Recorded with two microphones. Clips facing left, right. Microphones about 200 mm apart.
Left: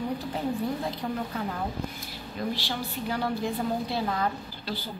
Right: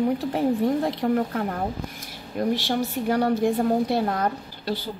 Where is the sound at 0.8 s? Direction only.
60° right (ahead or behind).